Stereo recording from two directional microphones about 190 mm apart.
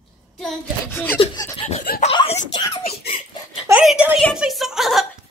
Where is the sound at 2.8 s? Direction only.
55° left (ahead or behind).